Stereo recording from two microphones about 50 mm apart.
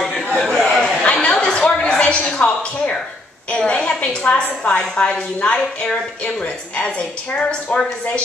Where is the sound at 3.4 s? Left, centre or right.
Centre.